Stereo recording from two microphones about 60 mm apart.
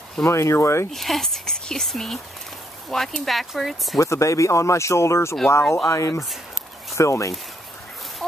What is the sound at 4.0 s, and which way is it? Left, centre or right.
Speech, left.